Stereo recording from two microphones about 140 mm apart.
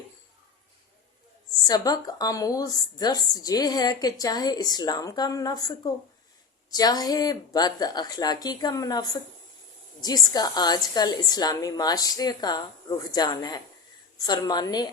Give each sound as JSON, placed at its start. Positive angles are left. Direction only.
{"t": 1.5, "sound": "a woman's voice", "side_deg": 25}